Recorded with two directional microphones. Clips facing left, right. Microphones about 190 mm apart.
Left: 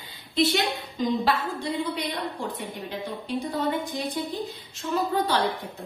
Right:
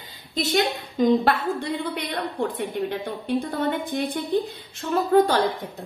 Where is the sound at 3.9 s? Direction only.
60° right (ahead or behind).